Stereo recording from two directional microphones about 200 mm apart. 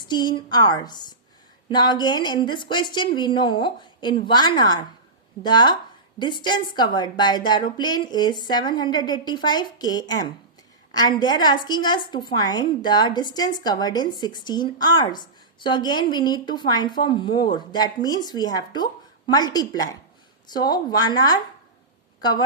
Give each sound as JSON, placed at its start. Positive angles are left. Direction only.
{"t": 0.0, "sound": "a woman's voice", "side_deg": 20}